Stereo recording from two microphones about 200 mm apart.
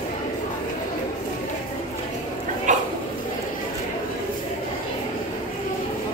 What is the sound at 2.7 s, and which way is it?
Dog, 40° right (ahead or behind).